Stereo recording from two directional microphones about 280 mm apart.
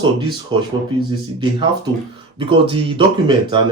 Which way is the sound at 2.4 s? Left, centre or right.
Centre.